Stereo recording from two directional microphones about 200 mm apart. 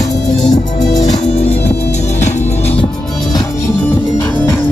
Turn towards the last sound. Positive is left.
turn(degrees=35)  # may be behind; listen again after turning